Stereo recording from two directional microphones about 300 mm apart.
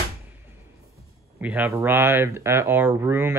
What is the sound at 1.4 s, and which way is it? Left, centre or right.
Speech, centre.